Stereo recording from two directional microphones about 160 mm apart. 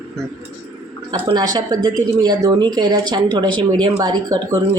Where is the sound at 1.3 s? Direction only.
25° right (ahead or behind).